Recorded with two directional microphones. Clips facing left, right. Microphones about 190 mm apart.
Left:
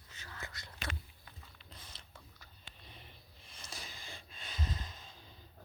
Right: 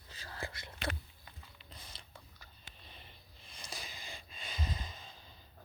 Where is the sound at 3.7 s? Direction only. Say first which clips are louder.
Right 2 dB; 15° right (ahead or behind).